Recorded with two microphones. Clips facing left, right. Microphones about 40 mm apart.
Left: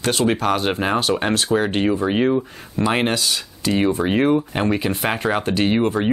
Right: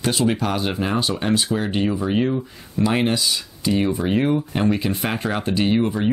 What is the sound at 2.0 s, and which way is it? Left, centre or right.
Speech, left.